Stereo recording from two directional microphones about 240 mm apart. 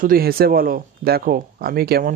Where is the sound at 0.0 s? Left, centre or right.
Right.